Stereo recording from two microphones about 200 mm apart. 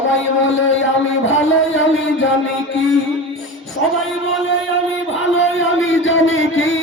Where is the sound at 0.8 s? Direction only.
85° left.